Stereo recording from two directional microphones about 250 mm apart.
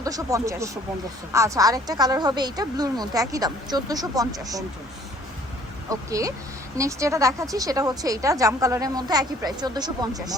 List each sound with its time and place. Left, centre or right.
0.0 s speech: centre
5.9 s speech: centre